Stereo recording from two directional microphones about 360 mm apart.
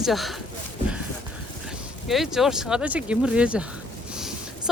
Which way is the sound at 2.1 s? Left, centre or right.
Centre.